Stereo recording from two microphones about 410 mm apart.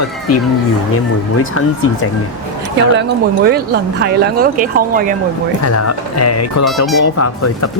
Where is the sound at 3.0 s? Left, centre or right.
Right.